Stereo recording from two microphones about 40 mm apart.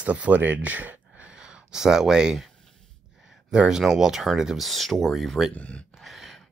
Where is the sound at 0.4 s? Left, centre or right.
Right.